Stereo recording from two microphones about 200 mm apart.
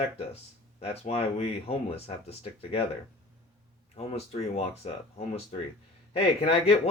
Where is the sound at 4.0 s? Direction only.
30° left (ahead or behind).